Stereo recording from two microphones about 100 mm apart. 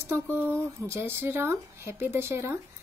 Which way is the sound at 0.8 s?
25° right (ahead or behind).